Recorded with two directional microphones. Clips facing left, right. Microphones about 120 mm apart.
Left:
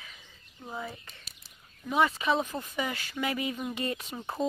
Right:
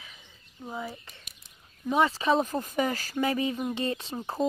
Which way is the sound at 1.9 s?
30° right (ahead or behind).